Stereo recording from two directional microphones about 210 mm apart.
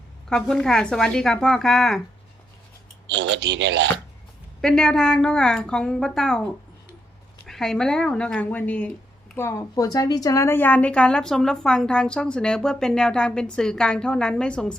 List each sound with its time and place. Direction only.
0.3 s speech: 5° left (ahead or behind)
3.1 s speech: 55° right (ahead or behind)
4.6 s speech: centre (ahead or behind)